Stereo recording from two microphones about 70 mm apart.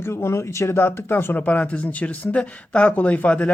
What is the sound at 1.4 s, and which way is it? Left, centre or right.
Speech, centre.